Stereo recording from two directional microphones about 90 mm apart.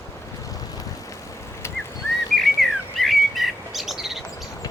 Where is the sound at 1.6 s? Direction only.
30° left (ahead or behind).